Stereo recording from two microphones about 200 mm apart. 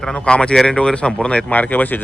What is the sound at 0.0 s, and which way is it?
A man's voice, 5° left (ahead or behind).